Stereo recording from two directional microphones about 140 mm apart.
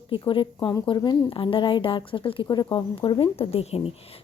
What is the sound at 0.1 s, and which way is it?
A woman's voice, 40° left (ahead or behind).